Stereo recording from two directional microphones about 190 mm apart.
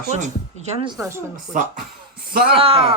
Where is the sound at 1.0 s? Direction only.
15° right (ahead or behind).